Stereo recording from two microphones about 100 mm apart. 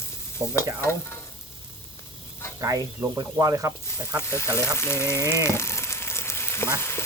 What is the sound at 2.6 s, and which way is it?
Speech, 35° right (ahead or behind).